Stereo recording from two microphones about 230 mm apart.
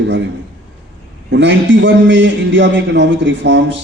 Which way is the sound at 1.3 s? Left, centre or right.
Right.